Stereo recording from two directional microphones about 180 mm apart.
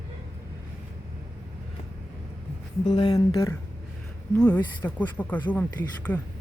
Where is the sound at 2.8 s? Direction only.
25° left (ahead or behind).